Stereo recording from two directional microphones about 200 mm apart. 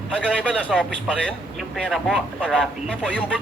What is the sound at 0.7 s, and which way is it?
Speech, 5° right (ahead or behind).